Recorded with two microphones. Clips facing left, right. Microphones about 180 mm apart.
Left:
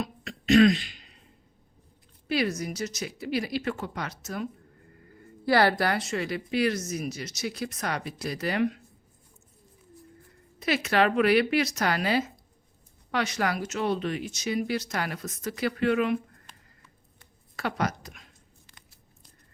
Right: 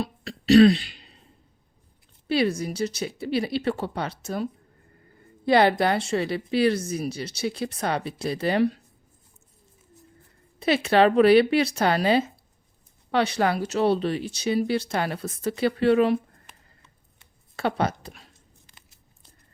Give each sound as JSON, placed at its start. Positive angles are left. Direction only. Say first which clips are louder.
{"t": 0.0, "sound": "throat clearing", "louder": "right 3 dB", "side_deg": -35}
{"t": 2.2, "sound": "a woman's voice", "louder": "right 4 dB", "side_deg": -30}
{"t": 5.5, "sound": "a woman's voice", "louder": "right 4 dB", "side_deg": -20}
{"t": 10.6, "sound": "a woman's voice", "louder": "right 5 dB", "side_deg": -30}
{"t": 17.2, "sound": "a sound", "louder": "right 5 dB", "side_deg": -30}
{"t": 18.7, "sound": "biting", "louder": "left 1 dB", "side_deg": -25}